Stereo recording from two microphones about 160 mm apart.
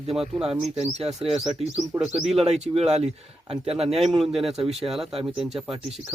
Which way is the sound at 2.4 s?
45° right (ahead or behind).